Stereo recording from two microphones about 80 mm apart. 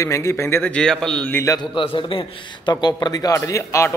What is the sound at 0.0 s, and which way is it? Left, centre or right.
Speech, left.